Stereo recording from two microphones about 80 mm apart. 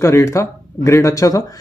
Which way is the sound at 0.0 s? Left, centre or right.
Left.